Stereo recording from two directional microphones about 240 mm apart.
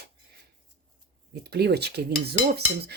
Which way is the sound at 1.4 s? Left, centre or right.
Right.